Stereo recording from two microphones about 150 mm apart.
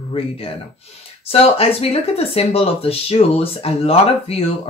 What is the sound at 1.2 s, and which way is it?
Speech, 40° left (ahead or behind).